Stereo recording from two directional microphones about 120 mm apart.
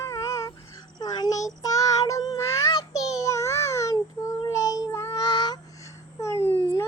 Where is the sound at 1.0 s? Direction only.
30° left (ahead or behind).